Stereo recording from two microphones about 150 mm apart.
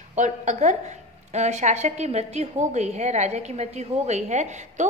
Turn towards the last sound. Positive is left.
turn(degrees=-50)  # may be behind; listen again after turning